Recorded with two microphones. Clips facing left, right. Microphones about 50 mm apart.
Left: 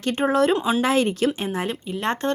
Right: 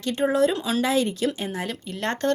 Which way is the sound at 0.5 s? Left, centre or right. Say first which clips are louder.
Left 4 dB; left.